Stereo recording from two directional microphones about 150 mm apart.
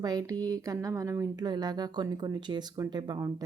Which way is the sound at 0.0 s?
25° right (ahead or behind).